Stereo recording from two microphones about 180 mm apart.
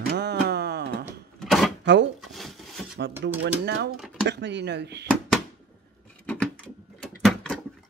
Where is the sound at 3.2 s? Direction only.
80° right.